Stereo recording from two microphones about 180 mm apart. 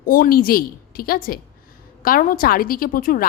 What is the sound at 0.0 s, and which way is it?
A woman's voice, 55° left (ahead or behind).